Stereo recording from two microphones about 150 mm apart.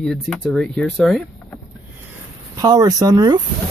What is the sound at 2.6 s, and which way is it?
Speech, 25° right (ahead or behind).